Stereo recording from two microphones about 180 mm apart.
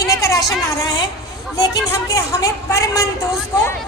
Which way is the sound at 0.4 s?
20° left (ahead or behind).